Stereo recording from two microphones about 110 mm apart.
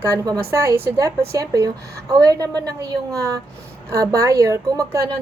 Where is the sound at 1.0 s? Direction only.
30° right (ahead or behind).